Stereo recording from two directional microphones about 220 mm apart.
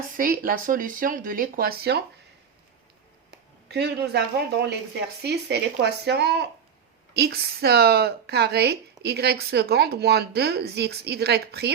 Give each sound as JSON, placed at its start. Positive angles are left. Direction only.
{"t": 0.2, "sound": "speech", "side_deg": -40}
{"t": 3.7, "sound": "speech", "side_deg": -50}